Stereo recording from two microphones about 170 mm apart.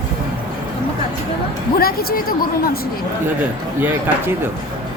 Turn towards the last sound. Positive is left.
turn(degrees=-10)  # may be behind; listen again after turning